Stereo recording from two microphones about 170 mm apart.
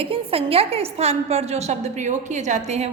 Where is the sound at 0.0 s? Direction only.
35° right (ahead or behind).